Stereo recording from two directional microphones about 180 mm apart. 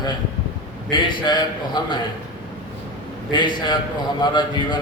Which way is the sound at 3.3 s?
25° left (ahead or behind).